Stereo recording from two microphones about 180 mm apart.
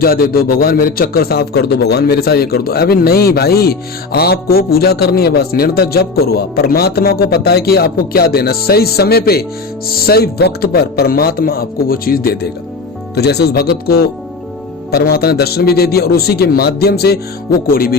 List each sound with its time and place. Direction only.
0.0 s speech: 55° left (ahead or behind)